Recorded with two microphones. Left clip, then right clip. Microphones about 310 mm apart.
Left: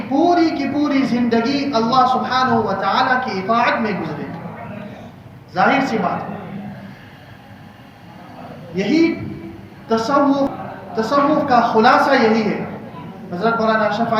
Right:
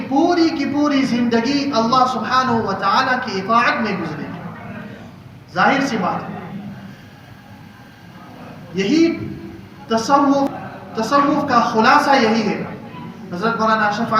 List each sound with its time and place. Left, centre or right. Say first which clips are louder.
0.1 s speech: left 1 dB; centre
5.5 s a woman's voice: even; centre
8.7 s a woman's voice: even; centre